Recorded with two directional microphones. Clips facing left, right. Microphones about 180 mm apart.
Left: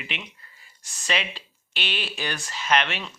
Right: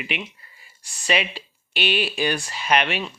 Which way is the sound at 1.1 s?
10° right (ahead or behind).